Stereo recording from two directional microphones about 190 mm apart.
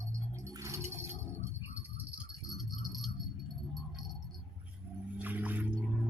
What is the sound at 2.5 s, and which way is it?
Keys jangling, centre (ahead or behind).